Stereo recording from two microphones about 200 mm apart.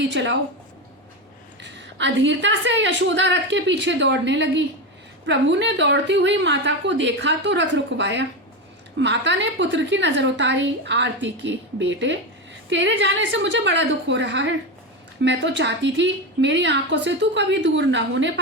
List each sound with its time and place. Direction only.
0.0 s a woman's voice: 65° right (ahead or behind)
1.6 s a woman's voice: 65° right (ahead or behind)